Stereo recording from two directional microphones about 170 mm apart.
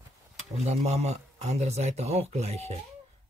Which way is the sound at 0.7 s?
40° right (ahead or behind).